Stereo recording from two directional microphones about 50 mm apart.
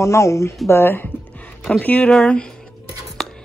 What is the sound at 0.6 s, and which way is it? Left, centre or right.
Speech, left.